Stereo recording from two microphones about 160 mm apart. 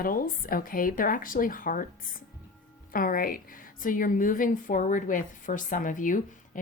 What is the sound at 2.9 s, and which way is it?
A woman's voice, 60° left (ahead or behind).